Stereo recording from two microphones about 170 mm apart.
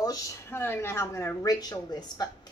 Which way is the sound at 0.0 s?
15° left (ahead or behind).